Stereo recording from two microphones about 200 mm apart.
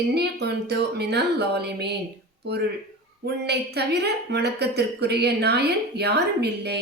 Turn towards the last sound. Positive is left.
turn(degrees=-55)  # may be behind; listen again after turning